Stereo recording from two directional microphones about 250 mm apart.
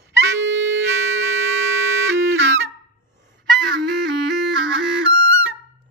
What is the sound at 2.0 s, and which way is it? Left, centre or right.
Music, right.